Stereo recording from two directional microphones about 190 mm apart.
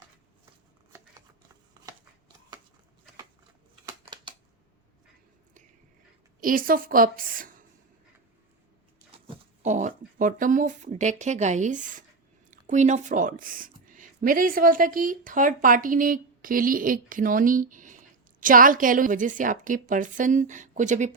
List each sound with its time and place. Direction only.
6.4 s speech: 45° right (ahead or behind)
9.3 s speech: 40° right (ahead or behind)